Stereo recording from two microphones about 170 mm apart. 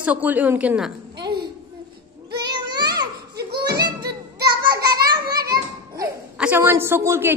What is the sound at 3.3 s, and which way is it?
Children playing, 70° right (ahead or behind).